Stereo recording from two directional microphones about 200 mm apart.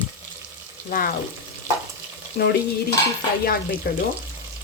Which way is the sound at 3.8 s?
50° left (ahead or behind).